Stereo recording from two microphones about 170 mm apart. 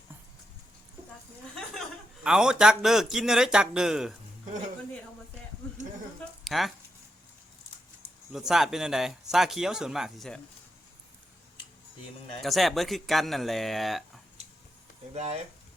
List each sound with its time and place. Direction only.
2.2 s speech: 5° right (ahead or behind)
6.4 s speech: centre (ahead or behind)
8.3 s speech: 5° right (ahead or behind)
12.4 s speech: centre (ahead or behind)
15.1 s speech: 40° right (ahead or behind)